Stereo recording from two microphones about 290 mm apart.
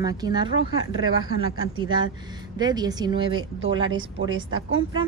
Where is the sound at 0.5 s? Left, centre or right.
Right.